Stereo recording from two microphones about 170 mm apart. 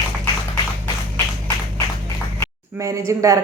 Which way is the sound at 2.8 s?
20° right (ahead or behind).